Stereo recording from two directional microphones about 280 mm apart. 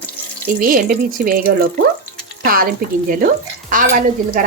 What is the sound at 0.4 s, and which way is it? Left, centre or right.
Speech, right.